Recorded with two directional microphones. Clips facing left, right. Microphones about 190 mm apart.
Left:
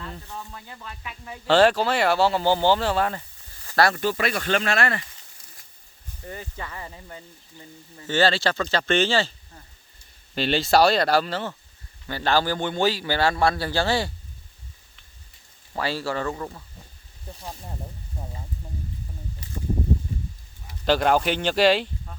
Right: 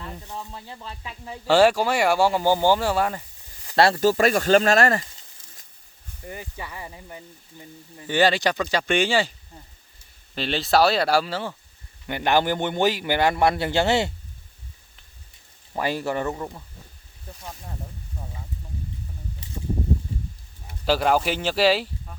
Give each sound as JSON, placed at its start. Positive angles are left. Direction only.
{"t": 0.0, "sound": "speech", "side_deg": -20}
{"t": 1.5, "sound": "speech", "side_deg": -10}
{"t": 3.8, "sound": "speech", "side_deg": -35}
{"t": 6.2, "sound": "speech", "side_deg": -15}
{"t": 10.3, "sound": "speech", "side_deg": 0}
{"t": 12.0, "sound": "a man's voice", "side_deg": -20}
{"t": 15.7, "sound": "speech", "side_deg": -15}
{"t": 19.4, "sound": "a sound", "side_deg": -25}
{"t": 20.8, "sound": "speech", "side_deg": -5}